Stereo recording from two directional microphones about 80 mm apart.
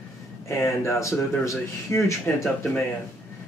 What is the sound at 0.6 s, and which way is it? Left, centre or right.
Speech, left.